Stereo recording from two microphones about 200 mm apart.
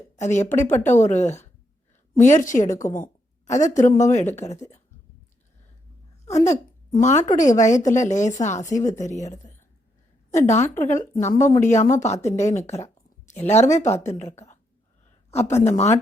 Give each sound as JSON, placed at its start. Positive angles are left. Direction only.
{"t": 0.2, "sound": "a woman's voice", "side_deg": 35}
{"t": 0.5, "sound": "speech", "side_deg": 10}
{"t": 1.0, "sound": "a woman's voice", "side_deg": 35}
{"t": 6.4, "sound": "a woman's voice", "side_deg": 35}
{"t": 10.3, "sound": "a woman's voice", "side_deg": 35}
{"t": 15.6, "sound": "a woman's voice", "side_deg": 35}